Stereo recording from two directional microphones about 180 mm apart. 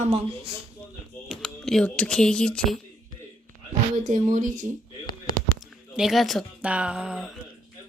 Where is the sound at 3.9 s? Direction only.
45° right (ahead or behind).